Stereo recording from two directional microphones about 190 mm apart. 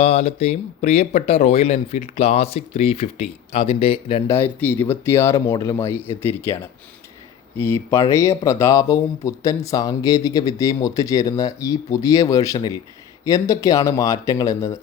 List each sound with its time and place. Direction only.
0.0 s speech: 35° left (ahead or behind)
4.3 s speech: 10° left (ahead or behind)